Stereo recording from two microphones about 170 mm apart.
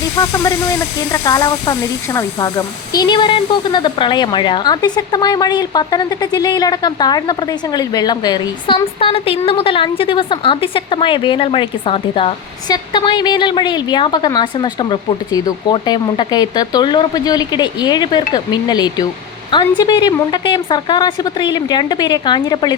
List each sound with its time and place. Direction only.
0.2 s speech: 20° left (ahead or behind)